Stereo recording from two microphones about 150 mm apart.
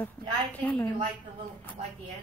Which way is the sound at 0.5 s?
10° left (ahead or behind).